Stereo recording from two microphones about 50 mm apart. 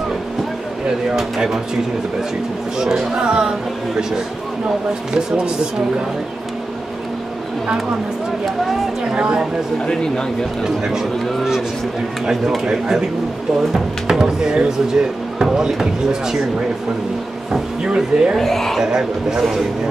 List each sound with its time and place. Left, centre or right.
1.1 s speech: centre
2.8 s speech: centre
5.3 s speech: centre
9.1 s speech: centre
10.6 s speech: centre
17.5 s a sound: centre
18.3 s speech: centre
18.8 s speech: centre